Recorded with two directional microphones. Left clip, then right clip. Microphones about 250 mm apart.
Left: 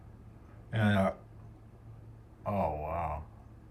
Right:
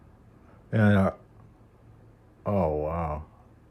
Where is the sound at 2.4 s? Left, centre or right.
Right.